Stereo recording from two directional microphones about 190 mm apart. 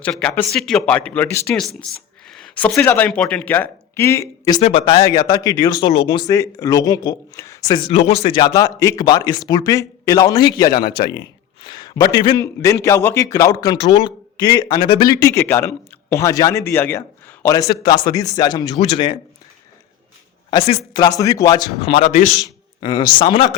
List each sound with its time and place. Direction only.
0.0 s a man's voice: 5° left (ahead or behind)
7.9 s a man's voice: 30° left (ahead or behind)
20.5 s a man's voice: 25° left (ahead or behind)
22.1 s a man's voice: 40° left (ahead or behind)
22.4 s speech: 20° left (ahead or behind)